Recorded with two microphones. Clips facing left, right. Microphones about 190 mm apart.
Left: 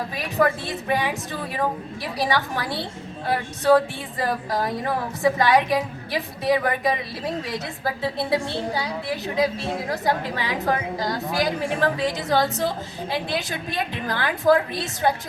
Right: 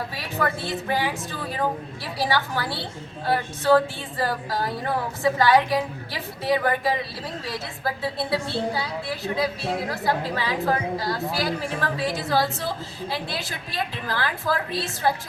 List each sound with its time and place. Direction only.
0.1 s a woman's voice: 20° left (ahead or behind)
8.0 s a woman's voice: 20° left (ahead or behind)